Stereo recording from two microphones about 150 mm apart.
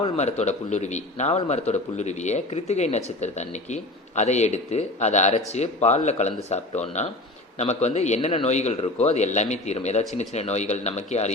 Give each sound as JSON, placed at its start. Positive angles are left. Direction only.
{"t": 0.0, "sound": "speech", "side_deg": 50}